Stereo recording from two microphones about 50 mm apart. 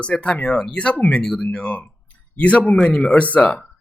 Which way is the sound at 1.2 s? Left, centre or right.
Centre.